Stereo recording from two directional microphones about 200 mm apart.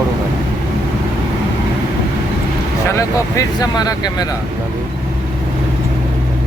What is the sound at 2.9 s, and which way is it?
Speech, 15° left (ahead or behind).